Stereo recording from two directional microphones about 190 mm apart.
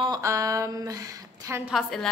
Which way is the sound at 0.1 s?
15° right (ahead or behind).